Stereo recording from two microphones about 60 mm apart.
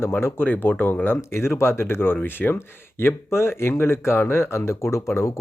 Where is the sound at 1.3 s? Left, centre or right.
Left.